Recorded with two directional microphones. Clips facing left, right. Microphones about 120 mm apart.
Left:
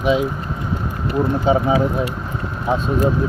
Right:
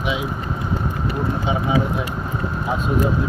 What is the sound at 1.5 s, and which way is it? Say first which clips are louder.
Speech: left 8 dB; 40° left (ahead or behind).